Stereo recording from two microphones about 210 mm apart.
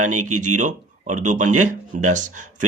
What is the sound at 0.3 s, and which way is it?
Speech, 35° right (ahead or behind).